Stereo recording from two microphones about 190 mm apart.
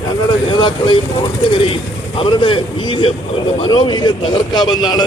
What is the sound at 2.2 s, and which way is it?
Speech, 25° left (ahead or behind).